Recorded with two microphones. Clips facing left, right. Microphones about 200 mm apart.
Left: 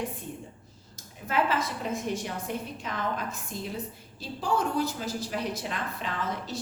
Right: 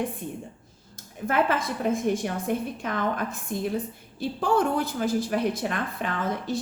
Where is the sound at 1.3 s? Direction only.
55° right (ahead or behind).